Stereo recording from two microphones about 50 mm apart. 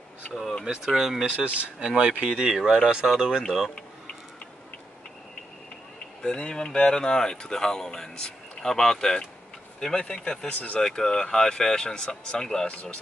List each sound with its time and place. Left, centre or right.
0.7 s speech: centre
1.3 s speech: right
2.2 s speech: centre
3.4 s speech: centre
6.2 s speech: centre